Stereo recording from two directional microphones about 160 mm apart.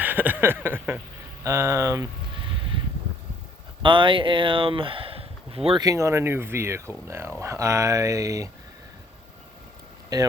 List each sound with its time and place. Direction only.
0.0 s a sound: 10° right (ahead or behind)
1.5 s speech: 20° right (ahead or behind)
3.8 s speech: 30° right (ahead or behind)
5.8 s speech: 20° right (ahead or behind)
10.1 s speech: 20° right (ahead or behind)